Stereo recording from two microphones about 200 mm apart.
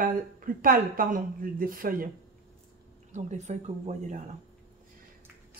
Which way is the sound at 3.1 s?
35° right (ahead or behind).